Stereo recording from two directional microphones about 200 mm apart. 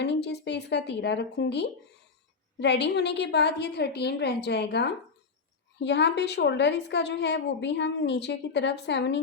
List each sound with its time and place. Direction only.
0.0 s a woman's voice: 60° left (ahead or behind)